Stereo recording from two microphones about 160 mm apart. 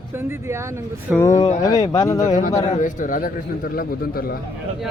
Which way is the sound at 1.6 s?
25° left (ahead or behind).